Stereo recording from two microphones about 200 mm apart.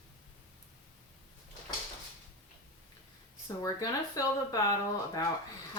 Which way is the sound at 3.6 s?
20° left (ahead or behind).